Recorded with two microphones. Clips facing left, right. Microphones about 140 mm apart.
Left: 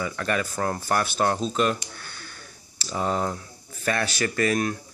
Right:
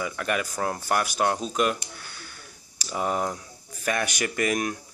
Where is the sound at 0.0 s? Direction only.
10° right (ahead or behind).